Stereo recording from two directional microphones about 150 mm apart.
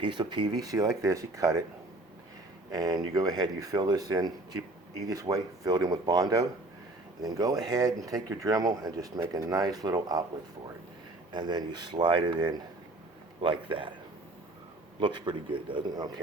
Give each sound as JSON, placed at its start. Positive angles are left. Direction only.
{"t": 0.0, "sound": "speech", "side_deg": -30}
{"t": 2.7, "sound": "speech", "side_deg": -25}
{"t": 11.3, "sound": "a man's voice", "side_deg": -30}
{"t": 14.9, "sound": "a man's voice", "side_deg": -30}